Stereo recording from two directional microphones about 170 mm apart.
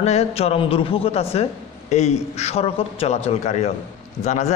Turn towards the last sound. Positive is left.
turn(degrees=45)  # may be behind; listen again after turning